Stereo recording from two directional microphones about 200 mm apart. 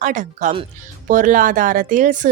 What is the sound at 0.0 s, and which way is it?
A woman's voice, 40° right (ahead or behind).